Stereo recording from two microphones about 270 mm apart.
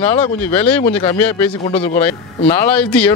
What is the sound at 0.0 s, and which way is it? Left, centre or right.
Speech, centre.